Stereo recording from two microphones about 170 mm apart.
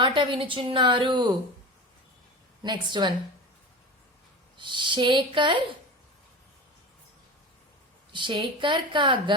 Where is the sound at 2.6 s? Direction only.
25° right (ahead or behind).